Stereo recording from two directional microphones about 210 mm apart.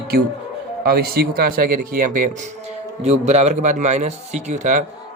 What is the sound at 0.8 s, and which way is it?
A man's voice, 45° right (ahead or behind).